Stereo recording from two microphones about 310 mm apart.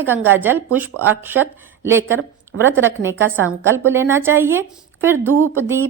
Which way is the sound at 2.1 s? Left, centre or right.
Right.